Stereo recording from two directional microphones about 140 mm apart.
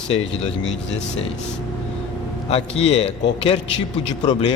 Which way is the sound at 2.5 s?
45° left (ahead or behind).